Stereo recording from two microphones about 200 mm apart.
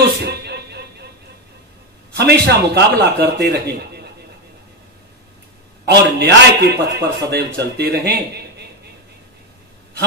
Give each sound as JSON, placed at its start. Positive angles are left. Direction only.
{"t": 0.2, "sound": "music", "side_deg": -55}
{"t": 2.1, "sound": "a man's voice", "side_deg": -55}
{"t": 5.9, "sound": "a man's voice", "side_deg": -55}